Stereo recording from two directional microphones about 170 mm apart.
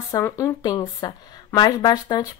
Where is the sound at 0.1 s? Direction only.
15° left (ahead or behind).